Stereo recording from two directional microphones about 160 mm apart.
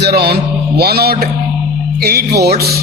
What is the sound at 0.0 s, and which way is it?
Mantra, 85° right.